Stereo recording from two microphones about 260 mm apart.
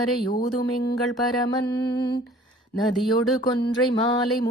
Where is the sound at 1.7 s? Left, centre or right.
Centre.